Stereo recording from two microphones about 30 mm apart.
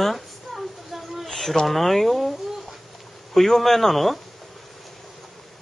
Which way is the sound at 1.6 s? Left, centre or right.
Centre.